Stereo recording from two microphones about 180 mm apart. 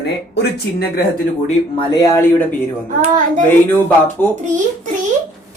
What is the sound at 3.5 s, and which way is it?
Speech, 10° left (ahead or behind).